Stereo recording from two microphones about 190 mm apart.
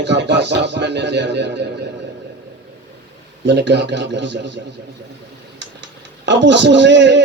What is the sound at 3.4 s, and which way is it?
A man's voice, 65° right (ahead or behind).